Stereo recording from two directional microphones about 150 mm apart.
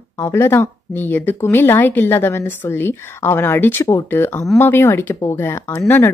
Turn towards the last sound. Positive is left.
turn(degrees=15)  # may be behind; listen again after turning